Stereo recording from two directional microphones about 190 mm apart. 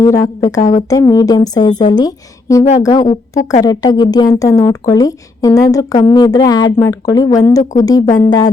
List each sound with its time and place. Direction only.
0.0 s speech: 20° left (ahead or behind)
0.6 s speech: 40° left (ahead or behind)
0.9 s a woman's voice: 20° left (ahead or behind)
8.0 s speech: 35° left (ahead or behind)